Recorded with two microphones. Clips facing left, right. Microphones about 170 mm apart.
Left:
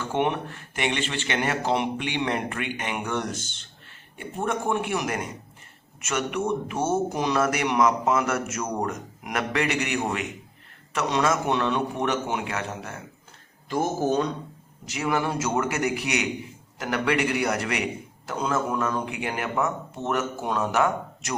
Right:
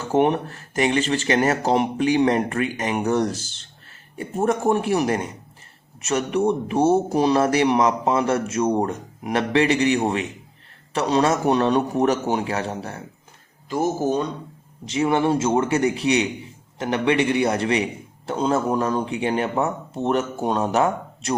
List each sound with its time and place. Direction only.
0.0 s speech: 40° right (ahead or behind)
13.7 s speech: 10° right (ahead or behind)
14.8 s speech: 30° right (ahead or behind)